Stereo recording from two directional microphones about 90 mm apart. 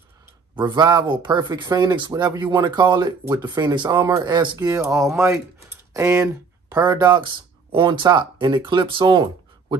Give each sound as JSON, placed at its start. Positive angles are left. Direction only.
{"t": 0.6, "sound": "speech", "side_deg": -55}
{"t": 4.6, "sound": "speech", "side_deg": -35}
{"t": 6.2, "sound": "speech", "side_deg": -50}